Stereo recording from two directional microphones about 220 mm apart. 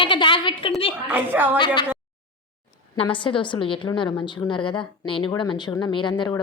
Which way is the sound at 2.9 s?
20° left (ahead or behind).